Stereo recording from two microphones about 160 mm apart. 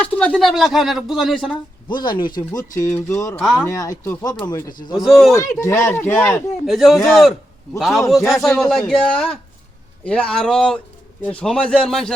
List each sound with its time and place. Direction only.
0.0 s speech: 5° left (ahead or behind)
1.9 s speech: 30° left (ahead or behind)
5.0 s speech: centre (ahead or behind)
5.4 s speech: 20° left (ahead or behind)
6.7 s speech: centre (ahead or behind)